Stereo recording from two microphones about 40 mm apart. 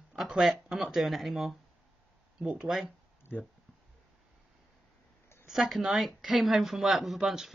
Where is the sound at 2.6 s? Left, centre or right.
Centre.